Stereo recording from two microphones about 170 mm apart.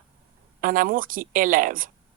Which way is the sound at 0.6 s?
55° right (ahead or behind).